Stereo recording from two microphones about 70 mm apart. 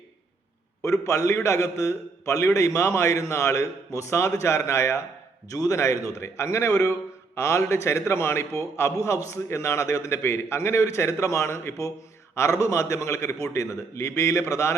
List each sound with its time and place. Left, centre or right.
0.8 s a man's voice: left